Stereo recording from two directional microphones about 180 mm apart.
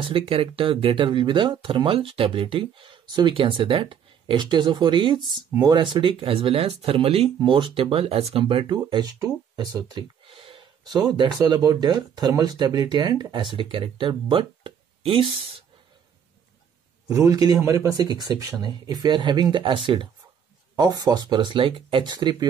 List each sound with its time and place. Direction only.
0.1 s speech: 30° right (ahead or behind)
17.1 s speech: 20° right (ahead or behind)